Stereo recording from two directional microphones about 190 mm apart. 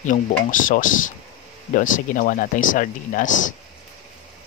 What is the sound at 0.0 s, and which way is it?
Speech, 45° left (ahead or behind).